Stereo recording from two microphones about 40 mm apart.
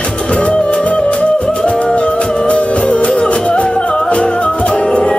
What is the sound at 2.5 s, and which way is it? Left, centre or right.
Music, left.